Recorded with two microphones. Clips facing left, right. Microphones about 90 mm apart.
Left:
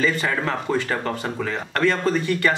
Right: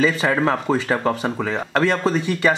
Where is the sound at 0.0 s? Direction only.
15° right (ahead or behind).